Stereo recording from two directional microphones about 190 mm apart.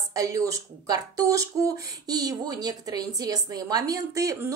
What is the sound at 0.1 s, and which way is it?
Speech, 15° right (ahead or behind).